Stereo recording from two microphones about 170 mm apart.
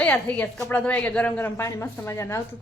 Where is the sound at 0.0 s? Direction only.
10° left (ahead or behind).